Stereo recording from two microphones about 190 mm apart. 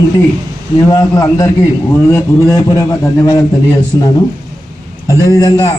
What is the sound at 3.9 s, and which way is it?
A man's voice, 20° left (ahead or behind).